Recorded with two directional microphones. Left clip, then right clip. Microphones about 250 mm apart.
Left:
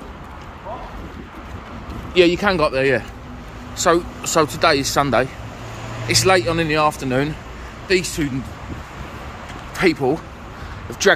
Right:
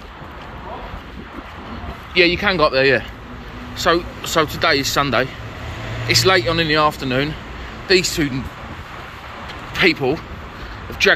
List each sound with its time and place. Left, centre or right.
2.1 s speech: left
2.6 s speech: centre
7.9 s speech: centre
9.8 s speech: left